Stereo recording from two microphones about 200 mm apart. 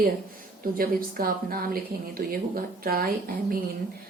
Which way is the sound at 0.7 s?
45° right (ahead or behind).